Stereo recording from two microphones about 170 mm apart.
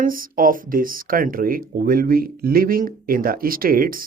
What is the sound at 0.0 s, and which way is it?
Speech, 55° right (ahead or behind).